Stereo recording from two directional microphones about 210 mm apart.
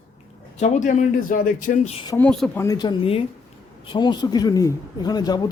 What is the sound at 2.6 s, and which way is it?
A man's voice, 20° left (ahead or behind).